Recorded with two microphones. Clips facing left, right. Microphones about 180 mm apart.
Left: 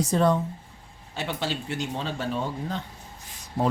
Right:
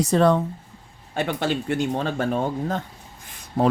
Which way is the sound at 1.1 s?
55° right (ahead or behind).